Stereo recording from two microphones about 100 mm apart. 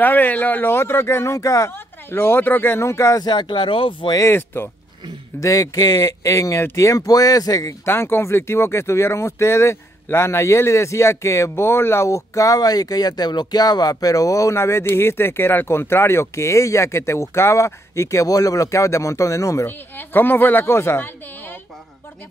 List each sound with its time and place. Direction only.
0.0 s speech: 20° left (ahead or behind)
3.3 s speech: 50° left (ahead or behind)
4.1 s speech: 25° left (ahead or behind)
5.4 s speech: 35° left (ahead or behind)
7.8 s speech: 25° left (ahead or behind)
20.0 s speech: 20° left (ahead or behind)